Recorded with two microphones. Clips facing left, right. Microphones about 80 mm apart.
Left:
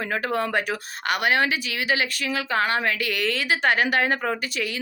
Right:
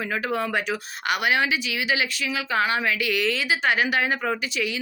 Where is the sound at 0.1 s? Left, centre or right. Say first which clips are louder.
Left 2 dB; left.